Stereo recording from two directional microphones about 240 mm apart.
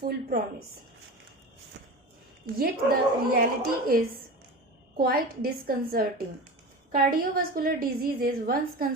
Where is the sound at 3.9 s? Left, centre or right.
Right.